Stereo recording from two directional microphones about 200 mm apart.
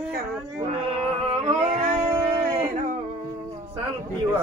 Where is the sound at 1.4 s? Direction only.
35° right (ahead or behind).